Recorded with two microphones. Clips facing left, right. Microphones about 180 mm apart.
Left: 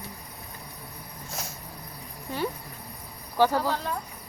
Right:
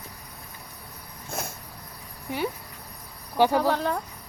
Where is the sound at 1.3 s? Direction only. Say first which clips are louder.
Right 5 dB; 55° right (ahead or behind).